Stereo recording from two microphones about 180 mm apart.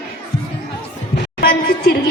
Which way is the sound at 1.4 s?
60° left (ahead or behind).